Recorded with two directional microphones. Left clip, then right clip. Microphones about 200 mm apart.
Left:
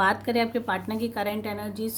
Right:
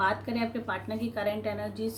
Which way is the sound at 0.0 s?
45° left (ahead or behind).